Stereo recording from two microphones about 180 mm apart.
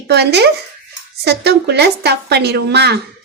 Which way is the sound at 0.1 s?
65° right (ahead or behind).